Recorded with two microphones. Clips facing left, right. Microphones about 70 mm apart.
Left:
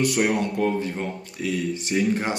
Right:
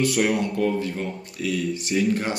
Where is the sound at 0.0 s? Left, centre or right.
Left.